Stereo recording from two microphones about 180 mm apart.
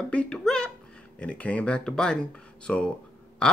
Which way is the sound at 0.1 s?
5° left (ahead or behind).